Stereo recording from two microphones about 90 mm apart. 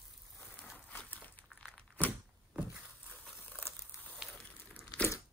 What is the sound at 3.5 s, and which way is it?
Crumpling, 20° left (ahead or behind).